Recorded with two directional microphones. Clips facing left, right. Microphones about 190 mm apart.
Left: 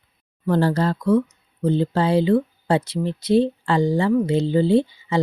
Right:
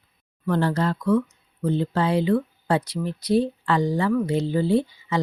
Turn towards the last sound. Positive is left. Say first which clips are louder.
# left 3 dB
turn(degrees=25)  # may be behind; listen again after turning